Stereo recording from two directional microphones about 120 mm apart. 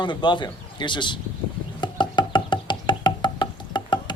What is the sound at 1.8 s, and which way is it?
Music, 40° left (ahead or behind).